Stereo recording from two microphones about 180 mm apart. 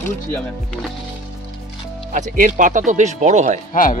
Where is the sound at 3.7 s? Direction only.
50° left (ahead or behind).